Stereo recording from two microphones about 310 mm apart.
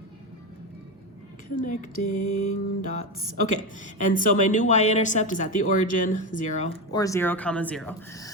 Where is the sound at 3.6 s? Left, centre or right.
Left.